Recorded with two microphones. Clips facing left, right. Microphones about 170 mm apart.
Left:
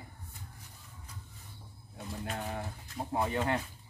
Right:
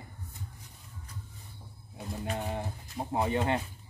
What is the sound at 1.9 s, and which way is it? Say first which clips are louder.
Speech: right 3 dB; 15° right (ahead or behind).